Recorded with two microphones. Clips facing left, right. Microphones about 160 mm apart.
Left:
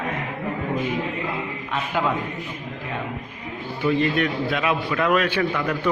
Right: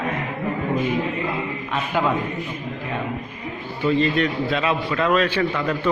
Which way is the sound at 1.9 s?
10° right (ahead or behind).